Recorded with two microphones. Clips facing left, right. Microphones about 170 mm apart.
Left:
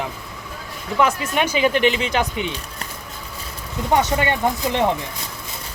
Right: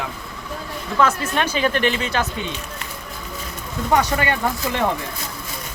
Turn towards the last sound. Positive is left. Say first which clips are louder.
# left 2 dB
turn(degrees=20)  # may be behind; listen again after turning